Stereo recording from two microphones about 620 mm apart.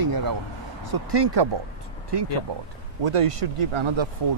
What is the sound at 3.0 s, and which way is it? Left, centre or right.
Speech, right.